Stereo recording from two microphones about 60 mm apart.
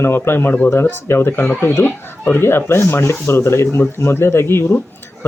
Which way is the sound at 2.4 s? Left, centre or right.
Left.